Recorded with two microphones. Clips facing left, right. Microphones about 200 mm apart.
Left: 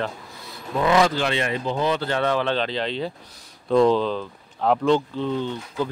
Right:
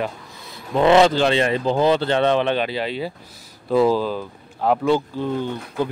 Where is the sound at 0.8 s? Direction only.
25° right (ahead or behind).